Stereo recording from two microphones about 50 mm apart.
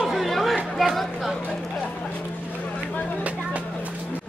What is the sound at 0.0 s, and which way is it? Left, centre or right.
Chatter, centre.